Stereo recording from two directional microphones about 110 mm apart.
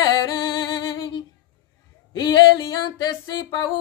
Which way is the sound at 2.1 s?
40° left (ahead or behind).